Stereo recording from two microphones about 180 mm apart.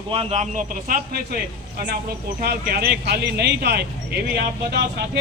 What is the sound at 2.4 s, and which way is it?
Speech, 60° right (ahead or behind).